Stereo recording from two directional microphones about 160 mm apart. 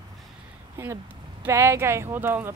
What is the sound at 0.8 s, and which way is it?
Speech, 15° right (ahead or behind).